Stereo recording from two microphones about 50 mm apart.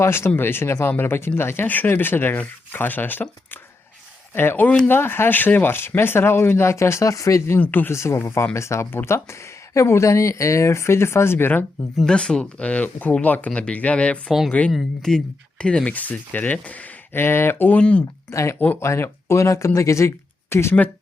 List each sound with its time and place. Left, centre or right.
0.0 s speech: left
1.6 s speech: left
1.9 s speech: left
6.7 s speech: left
7.6 s speech: left
7.9 s speech: left
12.0 s speech: centre; by 13.5 s left
13.5 s speech: left
14.7 s speech: centre
15.9 s speech: left
17.1 s speech: left
17.7 s speech: left
18.3 s speech: left